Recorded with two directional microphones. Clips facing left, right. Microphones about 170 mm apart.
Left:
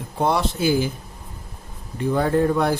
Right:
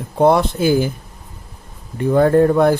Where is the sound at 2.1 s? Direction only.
50° right (ahead or behind).